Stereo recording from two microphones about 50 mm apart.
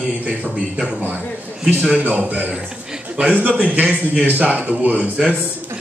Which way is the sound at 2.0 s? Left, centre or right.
Right.